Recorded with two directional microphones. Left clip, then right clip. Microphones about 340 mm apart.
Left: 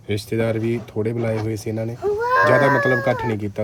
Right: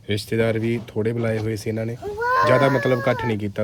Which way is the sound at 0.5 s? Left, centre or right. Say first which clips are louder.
Left 1 dB; centre.